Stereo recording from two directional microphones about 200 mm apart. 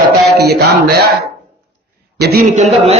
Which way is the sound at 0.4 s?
55° right (ahead or behind).